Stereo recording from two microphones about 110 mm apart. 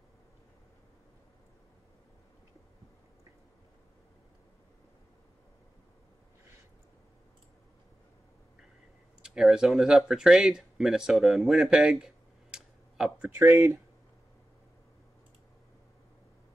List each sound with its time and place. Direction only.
9.2 s speech: 5° right (ahead or behind)
13.3 s speech: 20° right (ahead or behind)